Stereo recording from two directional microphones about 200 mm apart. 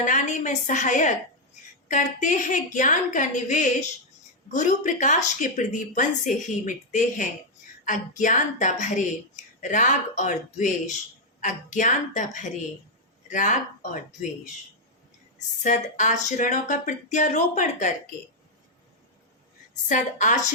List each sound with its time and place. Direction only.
0.0 s a woman's voice: 40° left (ahead or behind)
15.6 s a woman's voice: 40° left (ahead or behind)
19.9 s a woman's voice: 40° left (ahead or behind)